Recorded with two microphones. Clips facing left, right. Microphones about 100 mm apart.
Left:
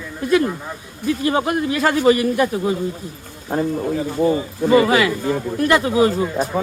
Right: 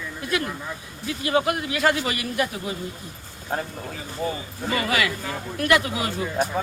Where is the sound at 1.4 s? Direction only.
35° left (ahead or behind).